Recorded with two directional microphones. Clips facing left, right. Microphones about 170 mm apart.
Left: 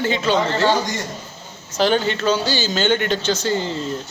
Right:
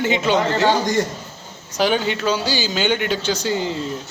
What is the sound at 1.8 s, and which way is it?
Speech, 10° right (ahead or behind).